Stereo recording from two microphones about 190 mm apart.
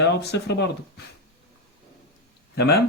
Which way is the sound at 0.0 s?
60° left (ahead or behind).